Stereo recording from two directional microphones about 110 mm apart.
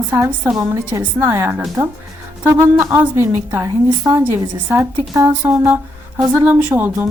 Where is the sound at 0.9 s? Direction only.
20° right (ahead or behind).